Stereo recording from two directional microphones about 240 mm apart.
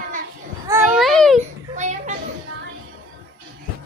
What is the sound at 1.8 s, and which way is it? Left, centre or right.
Children playing, right.